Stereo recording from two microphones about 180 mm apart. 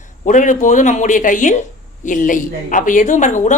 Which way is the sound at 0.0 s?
45° left (ahead or behind).